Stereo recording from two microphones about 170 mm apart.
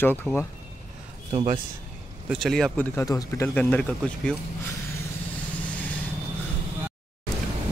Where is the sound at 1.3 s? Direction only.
30° right (ahead or behind).